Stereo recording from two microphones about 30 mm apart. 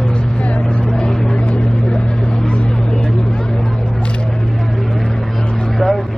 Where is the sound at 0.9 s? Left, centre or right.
Left.